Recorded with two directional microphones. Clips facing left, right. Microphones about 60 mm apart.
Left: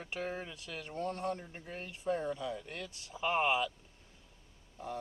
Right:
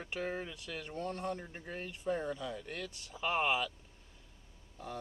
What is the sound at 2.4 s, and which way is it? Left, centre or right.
Speech, centre.